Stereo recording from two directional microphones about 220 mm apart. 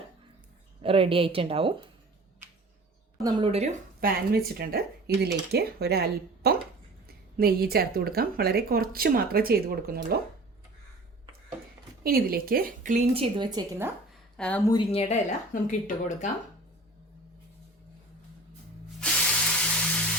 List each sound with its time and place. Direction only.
0.8 s speech: 25° right (ahead or behind)
3.2 s a woman's voice: 20° right (ahead or behind); by 10.2 s 45° right (ahead or behind)
12.0 s a woman's voice: 45° right (ahead or behind); by 13.9 s 15° right (ahead or behind)
14.3 s speech: 5° left (ahead or behind)
14.7 s a woman's voice: 25° left (ahead or behind)
18.9 s spray: 5° left (ahead or behind)